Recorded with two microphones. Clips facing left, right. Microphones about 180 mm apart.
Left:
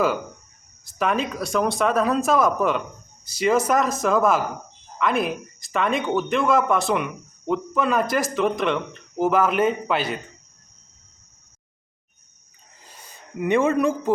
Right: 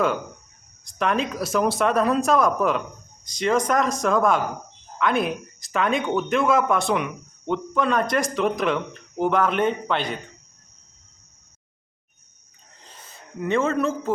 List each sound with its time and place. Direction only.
0.9 s speech: 5° left (ahead or behind)
13.1 s speech: 15° left (ahead or behind)